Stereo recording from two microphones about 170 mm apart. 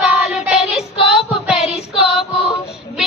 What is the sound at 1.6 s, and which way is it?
Child singing, 35° left (ahead or behind).